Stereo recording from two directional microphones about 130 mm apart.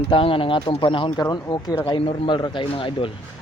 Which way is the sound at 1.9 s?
45° left (ahead or behind).